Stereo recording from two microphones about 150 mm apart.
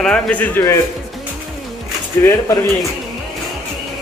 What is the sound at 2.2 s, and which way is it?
Speech, 20° left (ahead or behind).